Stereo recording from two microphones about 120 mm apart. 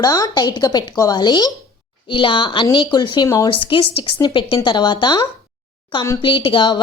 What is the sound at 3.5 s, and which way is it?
A woman's voice, 45° left (ahead or behind).